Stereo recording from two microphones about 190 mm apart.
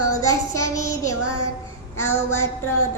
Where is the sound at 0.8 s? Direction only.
15° left (ahead or behind).